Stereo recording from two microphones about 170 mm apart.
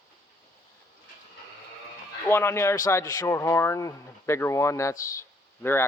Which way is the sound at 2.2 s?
15° left (ahead or behind).